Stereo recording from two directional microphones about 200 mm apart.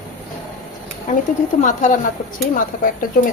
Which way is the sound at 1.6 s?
40° left (ahead or behind).